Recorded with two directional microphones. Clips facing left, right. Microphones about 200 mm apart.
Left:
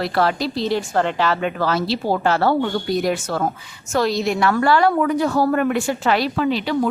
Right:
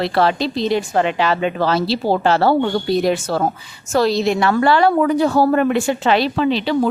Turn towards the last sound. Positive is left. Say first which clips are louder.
# right 3 dB
turn(degrees=-25)  # may be behind; listen again after turning